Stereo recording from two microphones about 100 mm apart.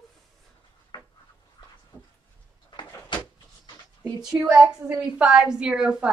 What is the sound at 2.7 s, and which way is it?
Door, 50° left (ahead or behind).